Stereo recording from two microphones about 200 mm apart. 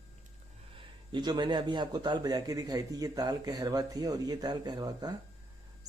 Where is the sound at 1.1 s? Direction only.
20° right (ahead or behind).